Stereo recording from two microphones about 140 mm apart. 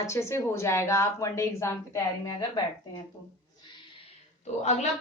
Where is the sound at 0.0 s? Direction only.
20° left (ahead or behind).